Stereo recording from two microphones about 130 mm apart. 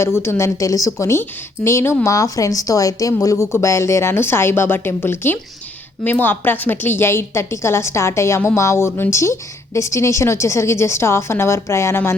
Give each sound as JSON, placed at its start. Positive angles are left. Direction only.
{"t": 0.0, "sound": "a woman's voice", "side_deg": 20}